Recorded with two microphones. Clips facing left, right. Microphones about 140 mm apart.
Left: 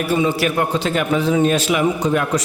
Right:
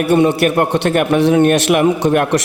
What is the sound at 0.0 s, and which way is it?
A man's voice, 65° right (ahead or behind).